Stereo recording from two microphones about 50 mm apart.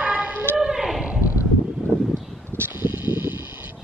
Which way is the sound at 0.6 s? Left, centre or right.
Centre.